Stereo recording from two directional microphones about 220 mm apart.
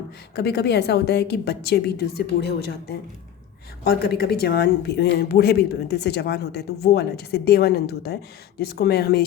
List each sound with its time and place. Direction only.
0.3 s speech: 50° left (ahead or behind)